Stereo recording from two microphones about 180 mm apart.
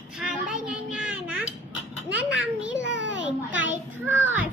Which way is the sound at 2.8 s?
90° right.